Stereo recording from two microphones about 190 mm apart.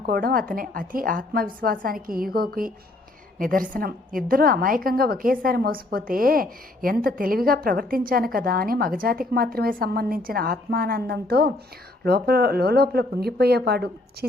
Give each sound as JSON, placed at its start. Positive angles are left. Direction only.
{"t": 0.0, "sound": "a woman's voice", "side_deg": -50}